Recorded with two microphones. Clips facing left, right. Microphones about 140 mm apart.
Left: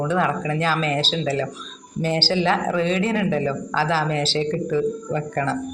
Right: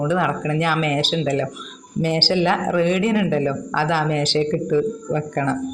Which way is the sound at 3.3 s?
15° left (ahead or behind).